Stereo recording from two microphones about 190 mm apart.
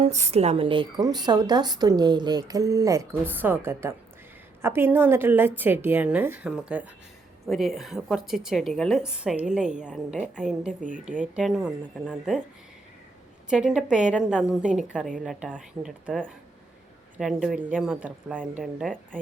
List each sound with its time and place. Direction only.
0.0 s a woman's voice: 35° right (ahead or behind); by 10.7 s 5° right (ahead or behind)
10.7 s speech: 45° right (ahead or behind)
11.2 s a woman's voice: 5° right (ahead or behind)
13.5 s a woman's voice: 5° right (ahead or behind)